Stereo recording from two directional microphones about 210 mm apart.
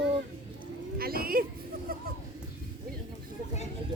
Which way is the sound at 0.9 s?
45° right (ahead or behind).